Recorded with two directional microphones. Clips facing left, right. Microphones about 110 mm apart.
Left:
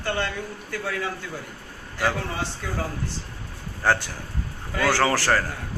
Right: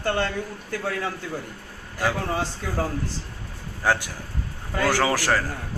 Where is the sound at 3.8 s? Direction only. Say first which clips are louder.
Left 1 dB; 10° right (ahead or behind).